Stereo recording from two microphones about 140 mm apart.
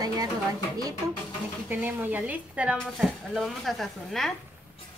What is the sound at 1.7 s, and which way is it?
Speech, 15° right (ahead or behind).